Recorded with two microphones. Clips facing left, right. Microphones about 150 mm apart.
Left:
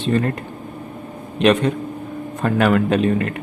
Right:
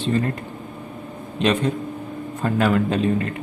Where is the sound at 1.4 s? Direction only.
65° left (ahead or behind).